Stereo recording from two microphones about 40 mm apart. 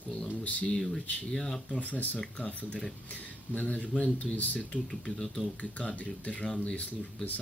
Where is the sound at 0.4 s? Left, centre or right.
Left.